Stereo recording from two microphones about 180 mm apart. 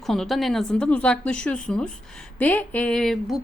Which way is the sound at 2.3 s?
10° left (ahead or behind).